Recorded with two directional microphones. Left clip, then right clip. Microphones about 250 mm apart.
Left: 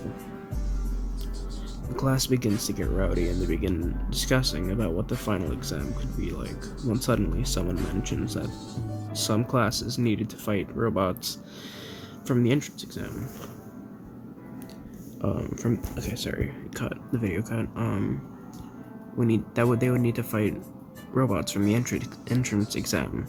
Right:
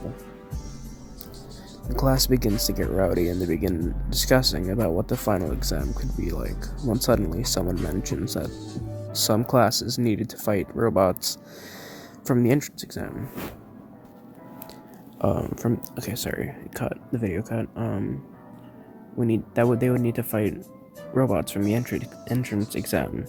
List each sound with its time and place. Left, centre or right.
2.0 s speech: right
15.2 s speech: centre
16.0 s speech: right
16.3 s speech: right
19.2 s speech: centre